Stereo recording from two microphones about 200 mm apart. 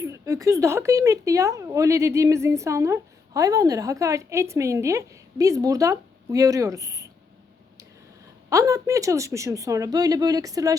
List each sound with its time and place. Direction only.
0.0 s speech: 15° right (ahead or behind)
8.4 s speech: 15° right (ahead or behind)